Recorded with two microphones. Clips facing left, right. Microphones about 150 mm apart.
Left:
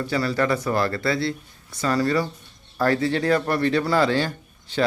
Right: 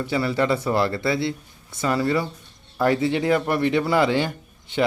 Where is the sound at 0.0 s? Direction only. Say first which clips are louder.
Right 1 dB; 20° right (ahead or behind).